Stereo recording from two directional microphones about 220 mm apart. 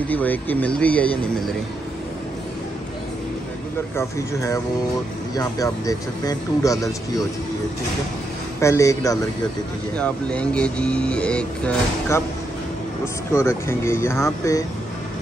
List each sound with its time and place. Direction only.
0.1 s speech: 10° left (ahead or behind)
3.9 s speech: 10° left (ahead or behind)
8.5 s speech: 15° left (ahead or behind)